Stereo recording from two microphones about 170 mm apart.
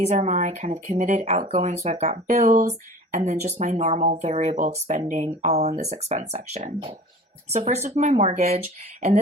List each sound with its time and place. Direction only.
0.0 s speech: 40° right (ahead or behind)